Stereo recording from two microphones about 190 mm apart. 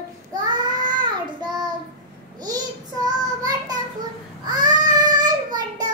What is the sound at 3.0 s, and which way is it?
Child singing, 20° right (ahead or behind).